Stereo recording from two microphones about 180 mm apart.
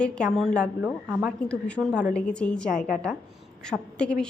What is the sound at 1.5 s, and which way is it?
Speech, 5° left (ahead or behind).